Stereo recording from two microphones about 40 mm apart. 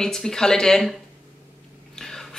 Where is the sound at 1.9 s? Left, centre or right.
Centre.